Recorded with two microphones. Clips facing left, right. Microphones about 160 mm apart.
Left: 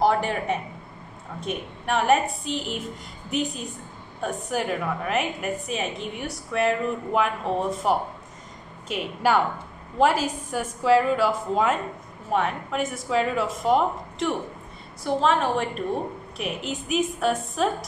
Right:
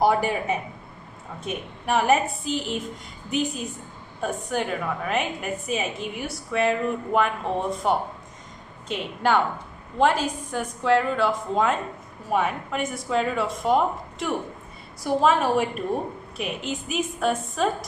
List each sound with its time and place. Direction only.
0.0 s a woman's voice: 10° right (ahead or behind)